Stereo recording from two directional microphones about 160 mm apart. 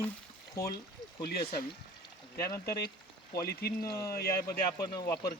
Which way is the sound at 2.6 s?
85° left.